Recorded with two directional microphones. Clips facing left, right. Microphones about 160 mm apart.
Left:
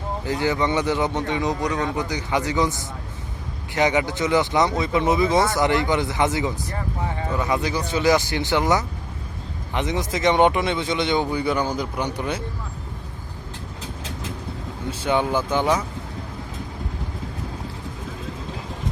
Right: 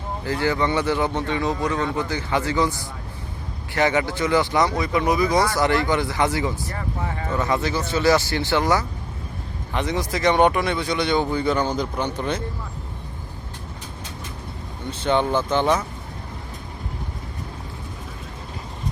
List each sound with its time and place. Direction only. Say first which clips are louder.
0.3 s speech: even; 20° left (ahead or behind)
14.8 s speech: right 1 dB; 10° left (ahead or behind)